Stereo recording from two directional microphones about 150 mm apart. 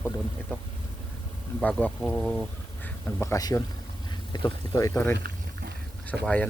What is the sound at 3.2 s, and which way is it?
Speech, 25° left (ahead or behind).